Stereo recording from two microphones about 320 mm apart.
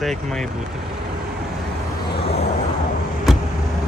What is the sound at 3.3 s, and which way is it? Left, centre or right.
Vehicle, centre.